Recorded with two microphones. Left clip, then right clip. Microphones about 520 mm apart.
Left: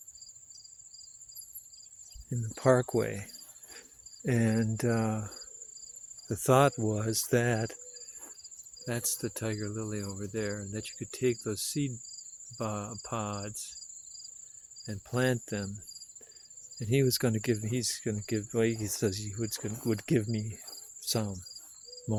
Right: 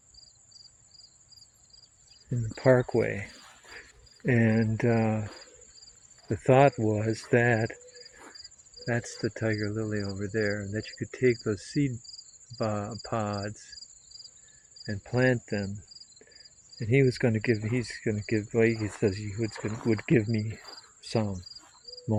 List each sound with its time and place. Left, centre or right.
2.5 s cricket: left
4.3 s cricket: left
6.2 s cricket: left
8.8 s cricket: left
14.8 s cricket: left
16.7 s cricket: left